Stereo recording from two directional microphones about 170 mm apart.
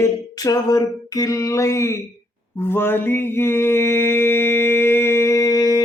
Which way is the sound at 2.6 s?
15° left (ahead or behind).